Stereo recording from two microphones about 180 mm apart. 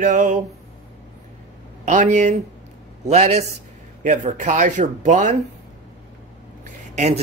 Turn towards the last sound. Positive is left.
turn(degrees=-35)  # may be behind; listen again after turning